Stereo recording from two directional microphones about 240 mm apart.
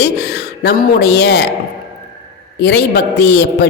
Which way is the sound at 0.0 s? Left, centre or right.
Left.